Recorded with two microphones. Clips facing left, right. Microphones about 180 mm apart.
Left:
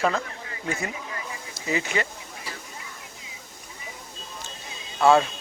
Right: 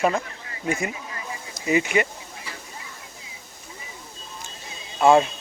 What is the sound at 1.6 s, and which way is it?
Speech, 15° right (ahead or behind).